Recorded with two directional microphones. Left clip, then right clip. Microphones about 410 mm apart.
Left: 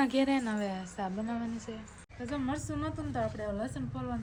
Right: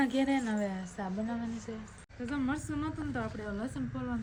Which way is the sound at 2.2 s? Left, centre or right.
Centre.